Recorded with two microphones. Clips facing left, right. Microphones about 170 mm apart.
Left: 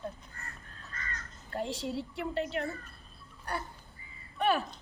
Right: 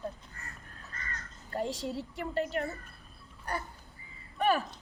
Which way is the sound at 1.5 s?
45° right (ahead or behind).